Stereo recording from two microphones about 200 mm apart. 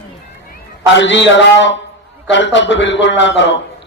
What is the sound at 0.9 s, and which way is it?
A man's voice, 65° left (ahead or behind).